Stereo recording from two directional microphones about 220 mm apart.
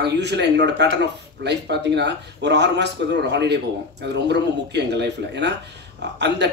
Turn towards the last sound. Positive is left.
turn(degrees=-50)  # may be behind; listen again after turning